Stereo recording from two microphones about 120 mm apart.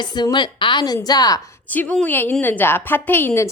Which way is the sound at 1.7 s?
10° left (ahead or behind).